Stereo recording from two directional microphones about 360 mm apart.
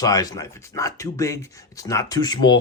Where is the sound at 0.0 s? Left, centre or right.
Centre.